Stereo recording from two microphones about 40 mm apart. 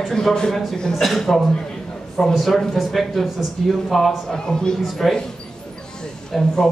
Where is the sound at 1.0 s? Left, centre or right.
Centre.